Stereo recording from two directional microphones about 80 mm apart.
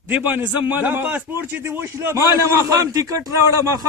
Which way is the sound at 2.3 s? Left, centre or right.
Right.